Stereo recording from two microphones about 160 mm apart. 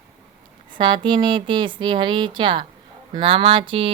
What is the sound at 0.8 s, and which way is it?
A woman's voice, 30° right (ahead or behind).